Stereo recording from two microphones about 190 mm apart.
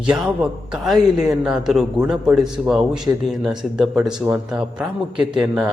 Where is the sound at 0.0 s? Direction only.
5° right (ahead or behind).